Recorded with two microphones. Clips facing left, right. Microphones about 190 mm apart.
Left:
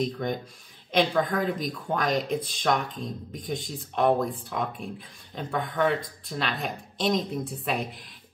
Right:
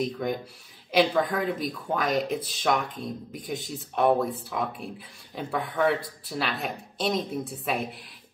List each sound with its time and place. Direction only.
0.0 s speech: 5° right (ahead or behind)